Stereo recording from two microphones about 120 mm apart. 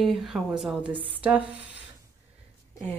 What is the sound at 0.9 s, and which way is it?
Speech, 45° right (ahead or behind).